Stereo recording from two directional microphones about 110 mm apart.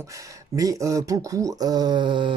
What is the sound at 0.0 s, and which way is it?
Speech, 30° right (ahead or behind).